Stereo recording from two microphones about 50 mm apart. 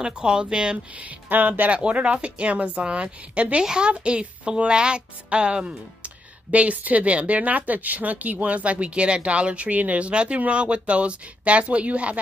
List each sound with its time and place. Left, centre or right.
0.0 s speech: centre
0.9 s speech: right
1.7 s a woman's voice: right